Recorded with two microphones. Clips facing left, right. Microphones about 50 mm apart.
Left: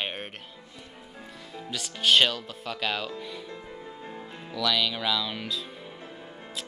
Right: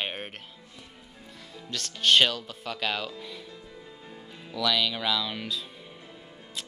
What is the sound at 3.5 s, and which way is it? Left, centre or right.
Music, left.